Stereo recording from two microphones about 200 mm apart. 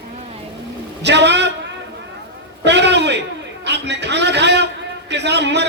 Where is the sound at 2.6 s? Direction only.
60° right (ahead or behind).